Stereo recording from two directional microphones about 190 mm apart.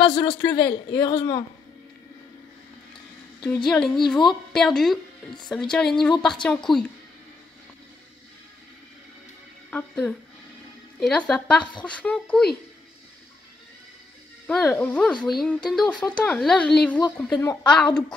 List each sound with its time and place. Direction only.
0.0 s a man's voice: 25° left (ahead or behind)
3.4 s a woman's voice: 5° left (ahead or behind)
9.7 s a woman's voice: 5° left (ahead or behind)
14.5 s a woman's voice: centre (ahead or behind)